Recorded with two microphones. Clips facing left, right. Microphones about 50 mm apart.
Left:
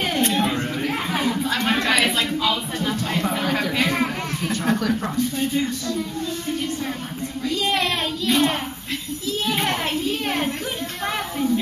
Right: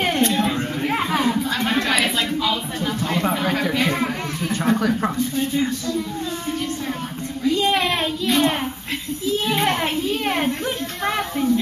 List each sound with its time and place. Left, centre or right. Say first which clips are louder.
0.2 s a sound: right 1 dB; centre
0.8 s a sound: right 5 dB; centre
3.7 s speech: even; centre
4.7 s speech: right 3 dB; centre
7.4 s child singing: right 4 dB; centre
9.4 s a child's voice: right 1 dB; centre